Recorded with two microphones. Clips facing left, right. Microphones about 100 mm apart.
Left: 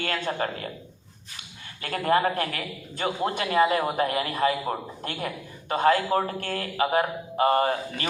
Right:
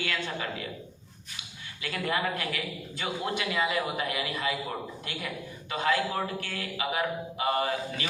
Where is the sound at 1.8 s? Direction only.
45° left (ahead or behind).